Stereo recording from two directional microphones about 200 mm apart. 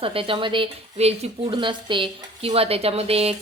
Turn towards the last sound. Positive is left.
turn(degrees=-30)  # may be behind; listen again after turning